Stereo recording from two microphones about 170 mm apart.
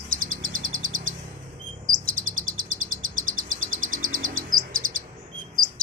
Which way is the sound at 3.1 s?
50° right (ahead or behind).